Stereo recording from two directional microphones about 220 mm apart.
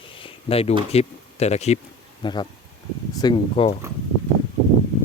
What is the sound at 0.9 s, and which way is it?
Speech, 30° left (ahead or behind).